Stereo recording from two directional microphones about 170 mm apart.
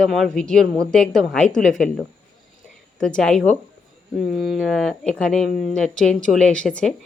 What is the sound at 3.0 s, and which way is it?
Speech, 5° left (ahead or behind).